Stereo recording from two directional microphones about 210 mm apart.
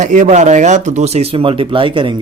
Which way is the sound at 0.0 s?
35° right (ahead or behind).